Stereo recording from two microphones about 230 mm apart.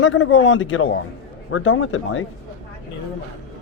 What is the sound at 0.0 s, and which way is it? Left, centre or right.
A man's voice, left.